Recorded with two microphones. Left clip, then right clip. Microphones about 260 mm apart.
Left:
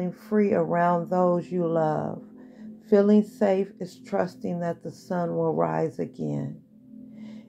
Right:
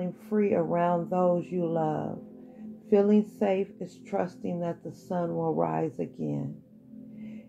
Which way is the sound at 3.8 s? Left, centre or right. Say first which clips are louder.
Left 4 dB; left.